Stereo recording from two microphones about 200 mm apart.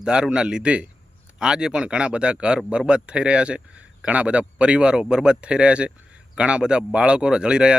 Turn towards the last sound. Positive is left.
turn(degrees=-5)  # may be behind; listen again after turning